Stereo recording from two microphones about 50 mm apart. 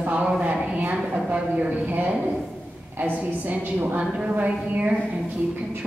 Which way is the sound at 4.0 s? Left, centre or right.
Right.